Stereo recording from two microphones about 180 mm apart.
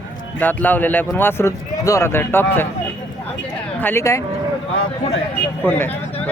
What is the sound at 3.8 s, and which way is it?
Speech, 10° left (ahead or behind).